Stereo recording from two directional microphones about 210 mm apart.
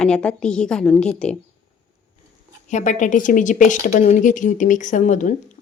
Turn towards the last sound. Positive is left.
turn(degrees=35)  # may be behind; listen again after turning